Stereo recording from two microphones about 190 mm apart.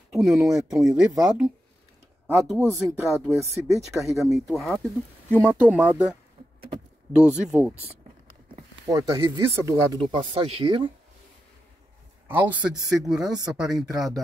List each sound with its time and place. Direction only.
0.2 s speech: centre (ahead or behind)
2.2 s speech: 5° right (ahead or behind)
3.3 s speech: 15° right (ahead or behind)
4.1 s speech: centre (ahead or behind)
5.7 s speech: 5° right (ahead or behind)
8.8 s speech: 20° right (ahead or behind)
12.3 s speech: 10° right (ahead or behind)